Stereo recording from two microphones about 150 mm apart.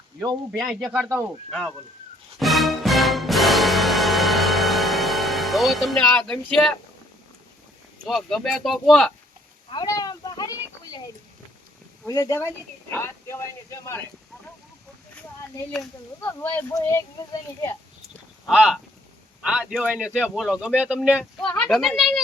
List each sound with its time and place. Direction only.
0.6 s speech: centre (ahead or behind)
1.5 s speech: 5° left (ahead or behind)
2.4 s music: centre (ahead or behind)
6.1 s speech: 5° left (ahead or behind)
8.0 s speech: 5° left (ahead or behind)
9.6 s a sound: 25° left (ahead or behind)
12.0 s speech: 25° left (ahead or behind)
16.2 s speech: 10° left (ahead or behind)
18.4 s speech: centre (ahead or behind)
21.4 s speech: 5° left (ahead or behind)